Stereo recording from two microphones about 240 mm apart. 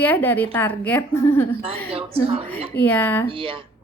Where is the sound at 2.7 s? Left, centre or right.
Centre.